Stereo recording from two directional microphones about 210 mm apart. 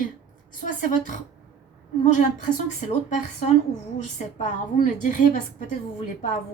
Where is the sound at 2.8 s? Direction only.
35° left (ahead or behind).